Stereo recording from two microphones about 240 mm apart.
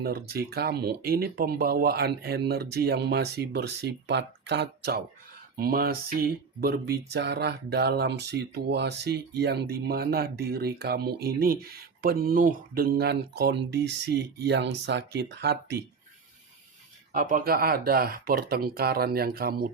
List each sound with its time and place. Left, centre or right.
0.0 s speech: right
17.1 s speech: right